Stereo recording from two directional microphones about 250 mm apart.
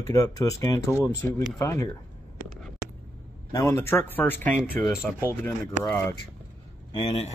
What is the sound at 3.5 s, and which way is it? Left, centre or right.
Speech, centre.